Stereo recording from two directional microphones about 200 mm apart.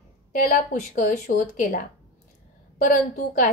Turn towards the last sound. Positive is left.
turn(degrees=45)  # may be behind; listen again after turning